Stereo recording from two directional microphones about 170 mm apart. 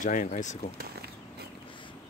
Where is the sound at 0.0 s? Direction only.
50° left (ahead or behind).